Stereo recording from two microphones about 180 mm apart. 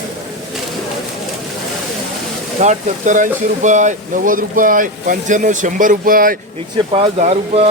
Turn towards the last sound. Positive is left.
turn(degrees=-35)  # may be behind; listen again after turning